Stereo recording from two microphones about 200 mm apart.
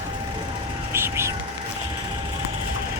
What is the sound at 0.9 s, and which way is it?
Vehicle, 10° right (ahead or behind).